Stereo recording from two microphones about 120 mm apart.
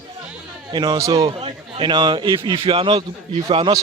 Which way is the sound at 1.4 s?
45° right (ahead or behind).